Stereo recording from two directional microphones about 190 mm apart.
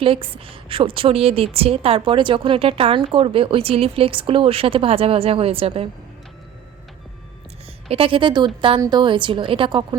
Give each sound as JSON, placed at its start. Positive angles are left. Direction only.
{"t": 0.0, "sound": "a woman's voice", "side_deg": -30}
{"t": 7.9, "sound": "a woman's voice", "side_deg": -30}